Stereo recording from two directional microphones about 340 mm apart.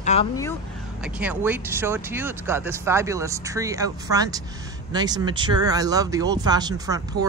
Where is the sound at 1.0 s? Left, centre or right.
Centre.